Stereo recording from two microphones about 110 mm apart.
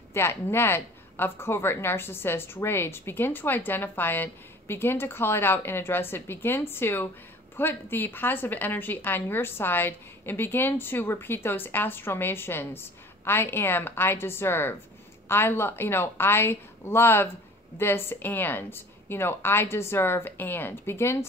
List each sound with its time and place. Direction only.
0.1 s a woman's voice: 20° left (ahead or behind)